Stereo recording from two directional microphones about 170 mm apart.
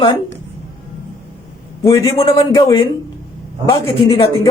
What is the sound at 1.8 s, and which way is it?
Speech, 20° left (ahead or behind).